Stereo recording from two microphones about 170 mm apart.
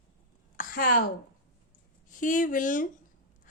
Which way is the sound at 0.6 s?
55° left (ahead or behind).